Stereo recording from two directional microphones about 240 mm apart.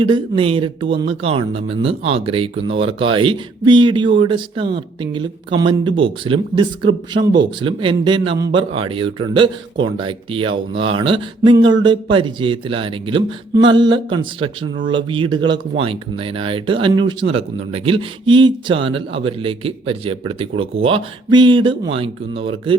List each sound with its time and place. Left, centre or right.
0.0 s speech: right